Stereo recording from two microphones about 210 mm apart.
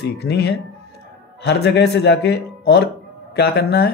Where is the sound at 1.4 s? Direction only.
50° left (ahead or behind).